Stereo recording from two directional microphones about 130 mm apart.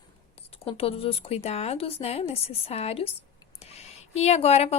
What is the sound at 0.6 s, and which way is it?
A woman's voice, 45° left (ahead or behind).